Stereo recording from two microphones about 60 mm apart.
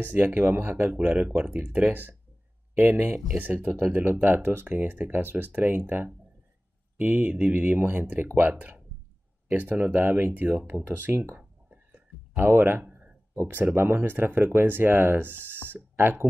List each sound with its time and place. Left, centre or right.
0.0 s speech: right
3.3 s speech: right
10.7 s speech: right